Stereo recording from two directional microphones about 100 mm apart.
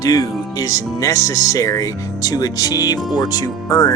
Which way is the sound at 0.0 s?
40° left (ahead or behind).